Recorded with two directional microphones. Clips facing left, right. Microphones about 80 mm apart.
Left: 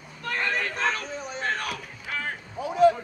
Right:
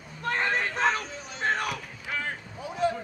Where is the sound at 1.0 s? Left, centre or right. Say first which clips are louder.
Left 6 dB; left.